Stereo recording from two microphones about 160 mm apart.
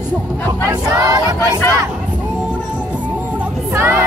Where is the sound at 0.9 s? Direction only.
25° right (ahead or behind).